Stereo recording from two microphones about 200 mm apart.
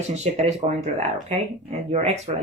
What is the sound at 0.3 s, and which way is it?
A woman's voice, 35° right (ahead or behind).